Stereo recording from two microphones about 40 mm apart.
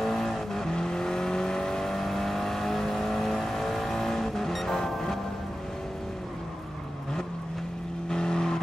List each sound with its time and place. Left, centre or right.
0.0 s vehicle: centre
8.1 s vehicle: centre